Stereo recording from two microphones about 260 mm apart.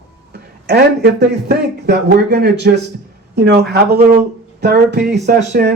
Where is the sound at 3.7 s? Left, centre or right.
Right.